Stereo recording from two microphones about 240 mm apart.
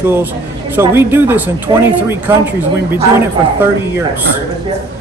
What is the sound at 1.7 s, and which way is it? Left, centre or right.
Speech, centre.